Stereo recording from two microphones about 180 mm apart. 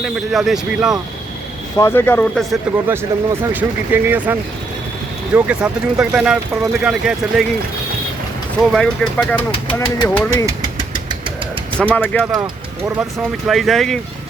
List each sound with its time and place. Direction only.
0.0 s speech: centre (ahead or behind)
1.8 s speech: 10° left (ahead or behind)
2.9 s speech: 15° right (ahead or behind)
8.7 s speech: 5° left (ahead or behind)
9.7 s speech: 20° left (ahead or behind)
11.8 s speech: 5° left (ahead or behind)
13.5 s speech: centre (ahead or behind)